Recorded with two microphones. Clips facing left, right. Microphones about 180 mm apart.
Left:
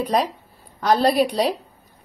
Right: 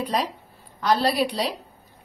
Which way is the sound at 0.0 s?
45° left (ahead or behind).